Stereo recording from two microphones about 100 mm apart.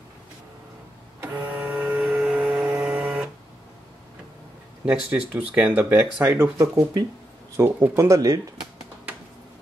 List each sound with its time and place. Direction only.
1.2 s vehicle: 15° right (ahead or behind)
4.8 s speech: 15° right (ahead or behind); by 8.4 s 30° right (ahead or behind)